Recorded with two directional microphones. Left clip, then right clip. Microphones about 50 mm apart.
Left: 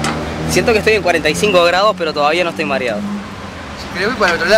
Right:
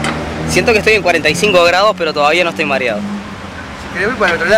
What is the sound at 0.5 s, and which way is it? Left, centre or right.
Speech, centre.